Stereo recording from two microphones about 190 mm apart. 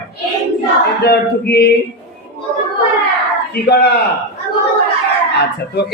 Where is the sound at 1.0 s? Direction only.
55° left (ahead or behind).